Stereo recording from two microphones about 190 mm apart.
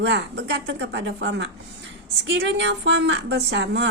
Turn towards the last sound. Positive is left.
turn(degrees=-65)  # may be behind; listen again after turning